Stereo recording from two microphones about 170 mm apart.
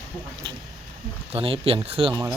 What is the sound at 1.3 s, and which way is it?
Speech, 35° right (ahead or behind).